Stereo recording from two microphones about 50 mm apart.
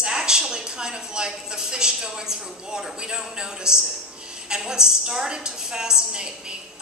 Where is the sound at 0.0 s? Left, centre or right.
Centre.